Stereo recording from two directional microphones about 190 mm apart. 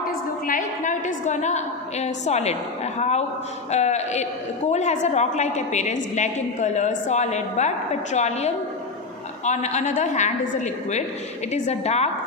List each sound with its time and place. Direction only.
0.4 s a woman's voice: 40° left (ahead or behind)